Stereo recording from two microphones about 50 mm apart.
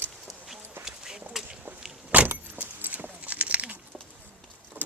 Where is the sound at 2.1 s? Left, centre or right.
Right.